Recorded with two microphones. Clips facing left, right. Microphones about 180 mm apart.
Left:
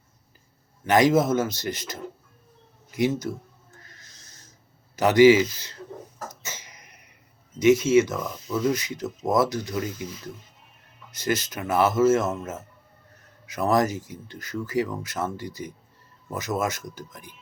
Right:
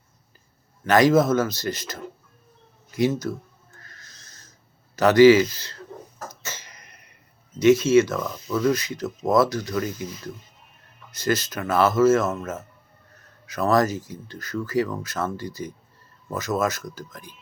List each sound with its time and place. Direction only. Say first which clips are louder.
0.9 s speech: right 2 dB; 20° left (ahead or behind)
3.8 s a sound: right 1 dB; 20° left (ahead or behind)
4.9 s speech: right 2 dB; 20° left (ahead or behind)
6.2 s a sound: right 4 dB; 15° left (ahead or behind)
7.6 s speech: right 2 dB; 20° left (ahead or behind)
11.1 s speech: right 2 dB; 20° left (ahead or behind)